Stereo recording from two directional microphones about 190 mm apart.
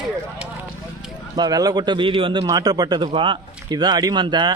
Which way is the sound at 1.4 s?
20° right (ahead or behind).